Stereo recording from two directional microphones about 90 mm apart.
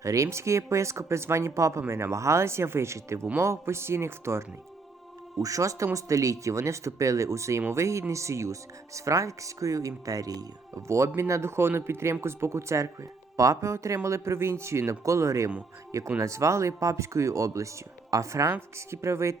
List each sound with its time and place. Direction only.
0.0 s speech: 35° right (ahead or behind)